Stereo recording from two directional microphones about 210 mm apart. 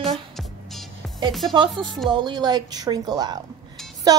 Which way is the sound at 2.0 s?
20° right (ahead or behind).